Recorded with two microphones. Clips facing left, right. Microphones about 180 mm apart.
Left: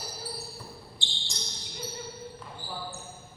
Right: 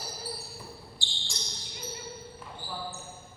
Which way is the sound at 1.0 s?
20° left (ahead or behind).